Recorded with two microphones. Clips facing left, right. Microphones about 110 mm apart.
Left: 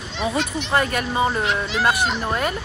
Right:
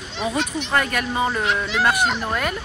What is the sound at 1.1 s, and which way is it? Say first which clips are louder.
Speech: left 1 dB; 10° left (ahead or behind).